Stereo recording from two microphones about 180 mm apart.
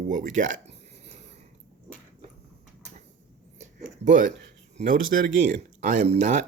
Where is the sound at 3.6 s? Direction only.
45° right (ahead or behind).